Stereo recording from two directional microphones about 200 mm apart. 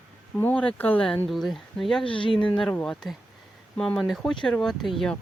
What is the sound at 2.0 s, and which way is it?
Speech, 25° left (ahead or behind).